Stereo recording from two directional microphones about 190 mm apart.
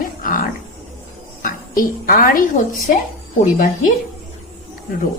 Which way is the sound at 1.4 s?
45° left (ahead or behind).